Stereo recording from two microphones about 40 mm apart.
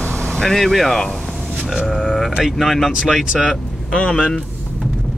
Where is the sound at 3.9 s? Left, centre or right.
Left.